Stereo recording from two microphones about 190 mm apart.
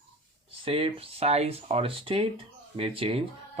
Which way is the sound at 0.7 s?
30° right (ahead or behind).